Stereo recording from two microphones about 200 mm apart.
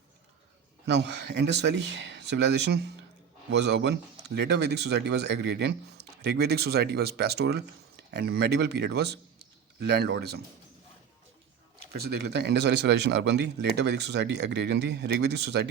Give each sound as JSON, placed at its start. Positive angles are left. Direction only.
{"t": 0.9, "sound": "speech", "side_deg": -60}
{"t": 11.9, "sound": "speech", "side_deg": -55}